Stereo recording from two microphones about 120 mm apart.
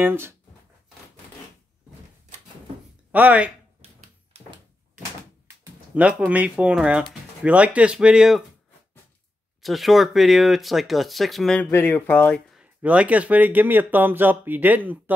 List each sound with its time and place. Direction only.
0.0 s speech: 20° right (ahead or behind)
3.1 s speech: 10° right (ahead or behind)
3.8 s typewriter: 60° right (ahead or behind)
5.9 s speech: 10° right (ahead or behind)
9.6 s speech: centre (ahead or behind)
11.7 s speech: 15° left (ahead or behind)
12.4 s speech: 10° right (ahead or behind)